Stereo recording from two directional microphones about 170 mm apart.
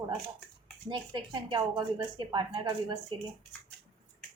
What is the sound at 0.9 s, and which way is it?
Speech, 30° right (ahead or behind).